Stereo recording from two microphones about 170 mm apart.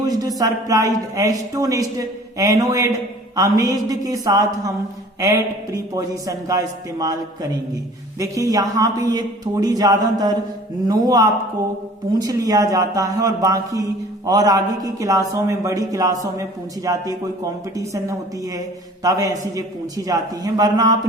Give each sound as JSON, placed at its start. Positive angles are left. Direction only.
{"t": 0.0, "sound": "a man's voice", "side_deg": -20}